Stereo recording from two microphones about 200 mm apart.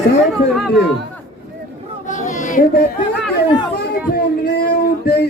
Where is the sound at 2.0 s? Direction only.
40° left (ahead or behind).